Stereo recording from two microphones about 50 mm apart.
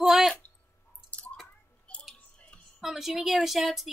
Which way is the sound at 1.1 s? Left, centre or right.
Left.